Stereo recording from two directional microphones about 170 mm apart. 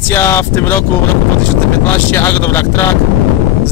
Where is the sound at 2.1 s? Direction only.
10° left (ahead or behind).